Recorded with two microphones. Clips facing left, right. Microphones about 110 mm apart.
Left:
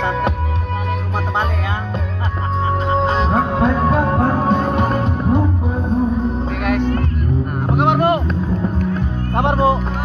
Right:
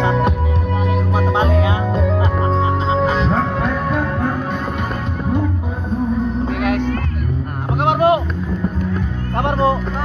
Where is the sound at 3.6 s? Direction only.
25° left (ahead or behind).